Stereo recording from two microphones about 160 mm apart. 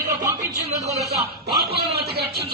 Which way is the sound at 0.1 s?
20° right (ahead or behind).